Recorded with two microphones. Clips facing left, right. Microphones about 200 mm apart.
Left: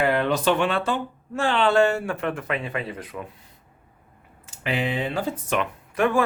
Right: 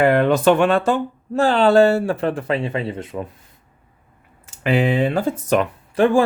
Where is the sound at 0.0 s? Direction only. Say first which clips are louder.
Right 7 dB; 55° right (ahead or behind); by 3.2 s 25° right (ahead or behind).